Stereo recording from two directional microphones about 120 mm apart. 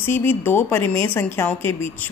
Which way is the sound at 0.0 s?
20° left (ahead or behind).